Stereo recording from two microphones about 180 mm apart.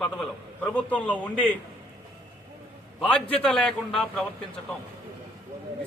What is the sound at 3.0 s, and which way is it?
A man's voice, 5° left (ahead or behind).